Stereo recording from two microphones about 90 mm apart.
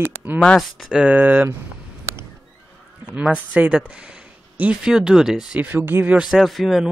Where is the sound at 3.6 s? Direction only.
15° right (ahead or behind).